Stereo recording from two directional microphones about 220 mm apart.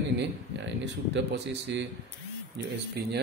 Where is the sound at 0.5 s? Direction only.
55° right (ahead or behind).